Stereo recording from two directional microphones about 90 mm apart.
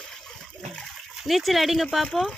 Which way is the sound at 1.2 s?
Centre (ahead or behind).